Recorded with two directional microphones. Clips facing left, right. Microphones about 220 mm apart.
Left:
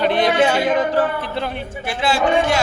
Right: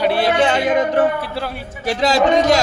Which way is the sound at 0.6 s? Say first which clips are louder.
Right 2 dB; 20° right (ahead or behind).